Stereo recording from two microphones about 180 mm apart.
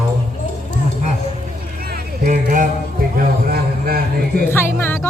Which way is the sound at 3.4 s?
55° right (ahead or behind).